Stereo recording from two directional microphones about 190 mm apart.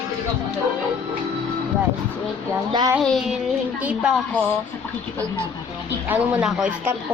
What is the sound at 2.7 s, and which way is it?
Child singing, 20° right (ahead or behind).